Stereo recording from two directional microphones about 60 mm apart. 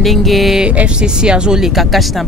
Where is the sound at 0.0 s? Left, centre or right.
Centre.